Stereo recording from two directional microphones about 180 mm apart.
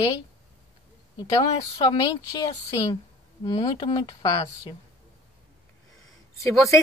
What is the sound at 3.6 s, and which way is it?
A woman's voice, 25° left (ahead or behind).